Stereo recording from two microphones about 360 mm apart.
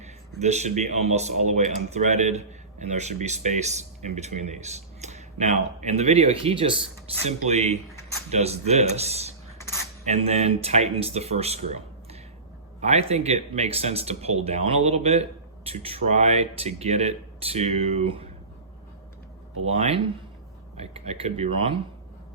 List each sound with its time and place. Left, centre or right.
0.0 s a sound: centre
0.8 s speech: centre
9.6 s cutlery: centre
10.1 s speech: centre
19.6 s speech: centre